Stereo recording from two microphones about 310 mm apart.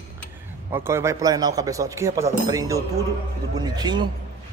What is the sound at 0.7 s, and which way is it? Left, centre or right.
Speech, centre.